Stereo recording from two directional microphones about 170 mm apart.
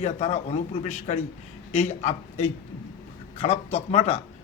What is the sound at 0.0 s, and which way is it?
Speech, 40° left (ahead or behind).